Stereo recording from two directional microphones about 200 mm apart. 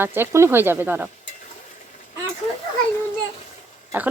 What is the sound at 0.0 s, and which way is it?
Speech, 10° right (ahead or behind).